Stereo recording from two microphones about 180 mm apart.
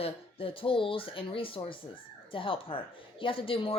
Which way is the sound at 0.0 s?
30° left (ahead or behind).